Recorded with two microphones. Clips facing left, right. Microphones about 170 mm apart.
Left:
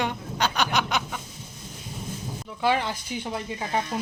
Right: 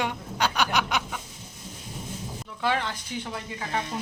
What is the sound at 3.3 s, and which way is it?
Speech, 20° left (ahead or behind).